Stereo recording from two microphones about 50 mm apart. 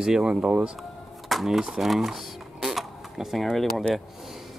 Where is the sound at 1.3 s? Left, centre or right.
Centre.